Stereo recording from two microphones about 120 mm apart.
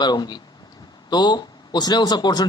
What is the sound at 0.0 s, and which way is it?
Speech, 35° left (ahead or behind).